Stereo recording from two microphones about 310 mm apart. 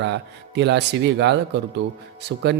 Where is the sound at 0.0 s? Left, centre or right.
Right.